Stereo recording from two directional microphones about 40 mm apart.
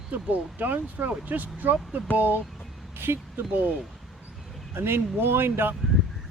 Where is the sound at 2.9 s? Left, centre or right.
Right.